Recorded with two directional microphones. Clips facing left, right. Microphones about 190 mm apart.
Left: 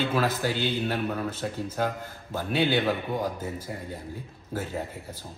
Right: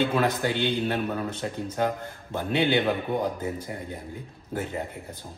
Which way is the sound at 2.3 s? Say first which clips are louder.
Right 1 dB; 20° right (ahead or behind).